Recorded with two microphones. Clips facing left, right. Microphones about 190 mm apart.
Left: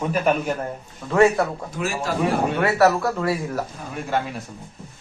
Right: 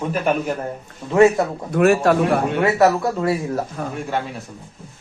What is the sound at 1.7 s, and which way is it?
Speech, 60° right (ahead or behind).